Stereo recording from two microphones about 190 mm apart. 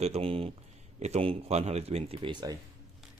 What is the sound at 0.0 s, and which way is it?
Speech, 30° right (ahead or behind).